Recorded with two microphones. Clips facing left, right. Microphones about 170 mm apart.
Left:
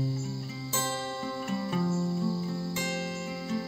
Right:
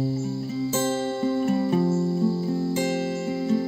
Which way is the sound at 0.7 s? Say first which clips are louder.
Right 7 dB; 25° right (ahead or behind).